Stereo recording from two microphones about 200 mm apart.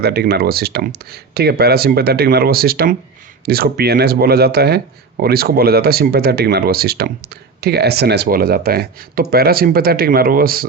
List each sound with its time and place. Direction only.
0.0 s speech: 55° right (ahead or behind)